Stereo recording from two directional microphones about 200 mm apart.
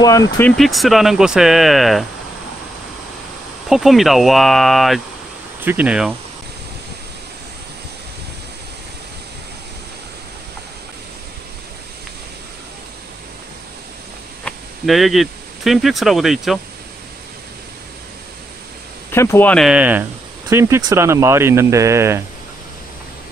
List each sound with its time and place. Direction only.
0.0 s speech: 15° left (ahead or behind)
0.5 s speech: centre (ahead or behind)
3.6 s speech: centre (ahead or behind)
14.4 s speech: centre (ahead or behind)
19.1 s speech: 10° left (ahead or behind); by 22.2 s 15° right (ahead or behind)